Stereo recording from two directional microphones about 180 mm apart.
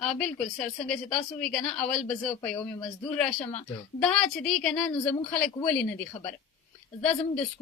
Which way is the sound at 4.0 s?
Centre (ahead or behind).